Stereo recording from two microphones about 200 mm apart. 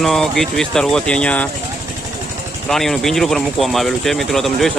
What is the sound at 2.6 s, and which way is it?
Speech, centre (ahead or behind).